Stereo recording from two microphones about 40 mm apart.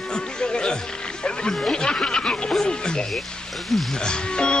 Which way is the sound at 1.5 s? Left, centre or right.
Centre.